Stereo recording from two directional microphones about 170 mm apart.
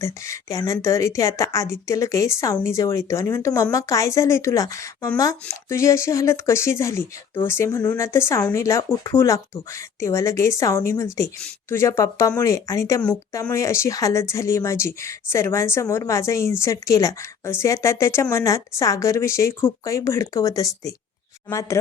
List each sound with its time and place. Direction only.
0.0 s a woman's voice: 20° left (ahead or behind)